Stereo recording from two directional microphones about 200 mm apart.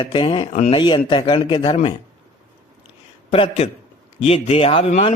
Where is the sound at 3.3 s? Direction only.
30° left (ahead or behind).